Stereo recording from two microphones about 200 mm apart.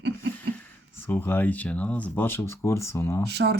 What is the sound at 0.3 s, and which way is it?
Speech, 10° left (ahead or behind).